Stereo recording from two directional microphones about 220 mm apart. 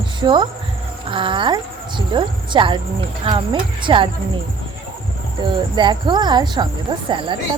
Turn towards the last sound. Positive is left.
turn(degrees=-20)  # may be behind; listen again after turning